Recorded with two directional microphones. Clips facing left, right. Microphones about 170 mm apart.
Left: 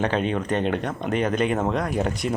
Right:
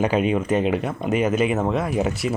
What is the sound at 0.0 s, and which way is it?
A man's voice, 10° right (ahead or behind).